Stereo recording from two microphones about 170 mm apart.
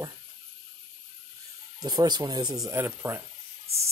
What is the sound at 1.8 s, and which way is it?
Speech, 25° right (ahead or behind).